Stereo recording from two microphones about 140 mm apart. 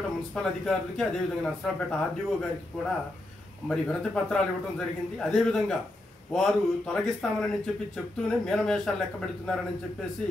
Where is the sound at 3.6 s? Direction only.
5° left (ahead or behind).